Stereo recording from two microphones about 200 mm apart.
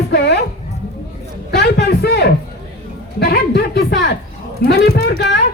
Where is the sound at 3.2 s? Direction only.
55° left (ahead or behind).